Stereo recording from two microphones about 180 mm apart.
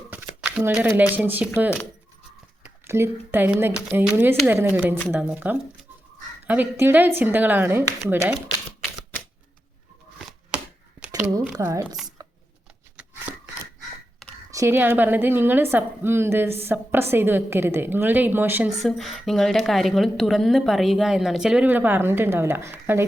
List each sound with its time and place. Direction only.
0.1 s speech: 10° right (ahead or behind)
2.6 s a woman's voice: 15° right (ahead or behind)
10.2 s chopping: centre (ahead or behind)
11.1 s a sound: 20° right (ahead or behind)
11.5 s a woman's voice: 15° right (ahead or behind)
14.5 s a woman's voice: 15° right (ahead or behind)
18.8 s a woman's voice: centre (ahead or behind)